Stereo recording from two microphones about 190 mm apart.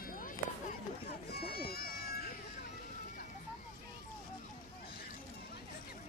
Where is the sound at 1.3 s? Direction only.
55° left (ahead or behind).